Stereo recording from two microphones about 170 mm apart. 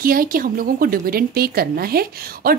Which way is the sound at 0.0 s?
55° right (ahead or behind).